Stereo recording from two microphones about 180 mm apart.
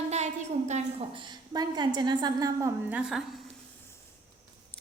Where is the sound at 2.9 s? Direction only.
5° right (ahead or behind).